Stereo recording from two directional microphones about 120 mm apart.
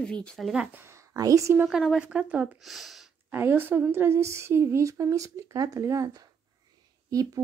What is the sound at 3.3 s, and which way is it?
Speech, 15° right (ahead or behind).